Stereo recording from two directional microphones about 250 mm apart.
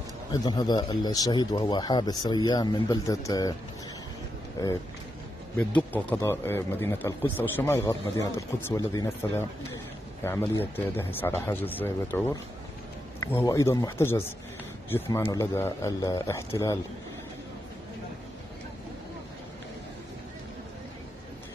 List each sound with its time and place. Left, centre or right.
0.3 s speech: centre
4.6 s speech: centre